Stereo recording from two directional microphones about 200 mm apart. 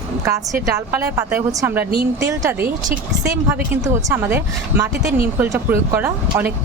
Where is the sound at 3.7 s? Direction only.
15° right (ahead or behind).